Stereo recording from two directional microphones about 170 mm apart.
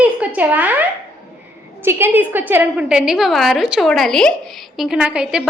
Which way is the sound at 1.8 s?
15° right (ahead or behind).